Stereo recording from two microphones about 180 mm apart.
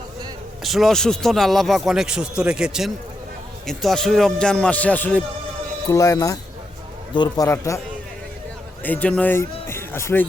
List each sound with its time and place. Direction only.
0.6 s a man's voice: centre (ahead or behind); by 7.8 s 15° left (ahead or behind)
8.8 s a man's voice: 10° left (ahead or behind)